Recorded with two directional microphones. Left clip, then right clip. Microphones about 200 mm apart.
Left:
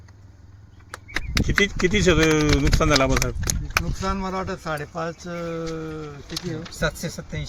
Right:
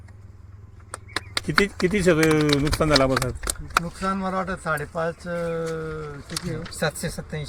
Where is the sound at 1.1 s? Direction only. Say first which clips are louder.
Right 1 dB; centre (ahead or behind).